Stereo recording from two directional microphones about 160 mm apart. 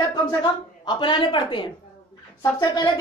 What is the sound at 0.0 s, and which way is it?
A woman's voice, 25° left (ahead or behind).